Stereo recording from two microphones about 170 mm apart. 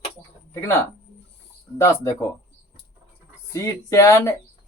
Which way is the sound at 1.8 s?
20° left (ahead or behind).